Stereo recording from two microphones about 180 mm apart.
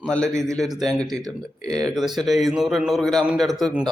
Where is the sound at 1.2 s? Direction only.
20° right (ahead or behind).